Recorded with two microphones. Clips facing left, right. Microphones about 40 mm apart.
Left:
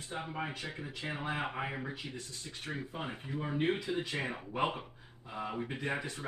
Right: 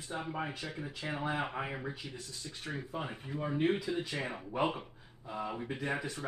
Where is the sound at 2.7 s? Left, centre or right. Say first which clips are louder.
Right 1 dB; left.